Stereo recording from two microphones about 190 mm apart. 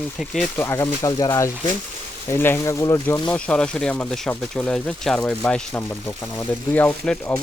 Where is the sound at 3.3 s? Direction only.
5° left (ahead or behind).